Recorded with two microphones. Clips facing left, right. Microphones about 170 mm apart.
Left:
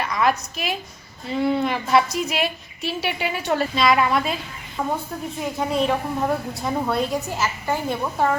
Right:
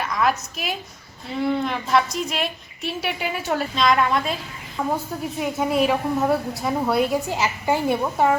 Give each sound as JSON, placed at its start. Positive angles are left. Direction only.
{"t": 0.0, "sound": "a woman's voice", "side_deg": 0}
{"t": 7.3, "sound": "a woman's voice", "side_deg": -15}